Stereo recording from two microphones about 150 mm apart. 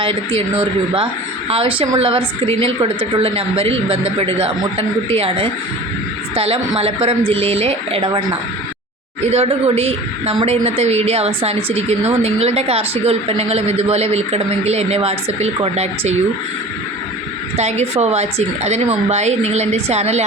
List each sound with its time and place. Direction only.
1.5 s a woman's voice: 40° right (ahead or behind)
9.3 s a woman's voice: 45° right (ahead or behind)
17.6 s a woman's voice: 50° right (ahead or behind)